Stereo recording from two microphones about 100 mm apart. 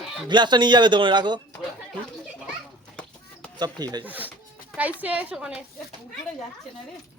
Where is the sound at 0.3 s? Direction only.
50° right (ahead or behind).